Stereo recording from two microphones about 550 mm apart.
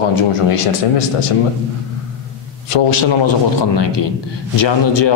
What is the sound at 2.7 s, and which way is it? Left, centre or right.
Speech, left.